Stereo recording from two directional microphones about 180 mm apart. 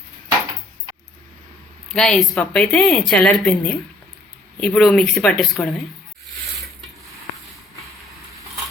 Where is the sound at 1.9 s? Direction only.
5° left (ahead or behind).